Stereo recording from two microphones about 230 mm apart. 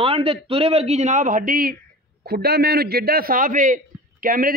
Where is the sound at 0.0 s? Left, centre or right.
Right.